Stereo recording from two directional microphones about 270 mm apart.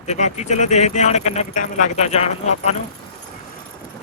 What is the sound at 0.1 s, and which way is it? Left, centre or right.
Speech, left.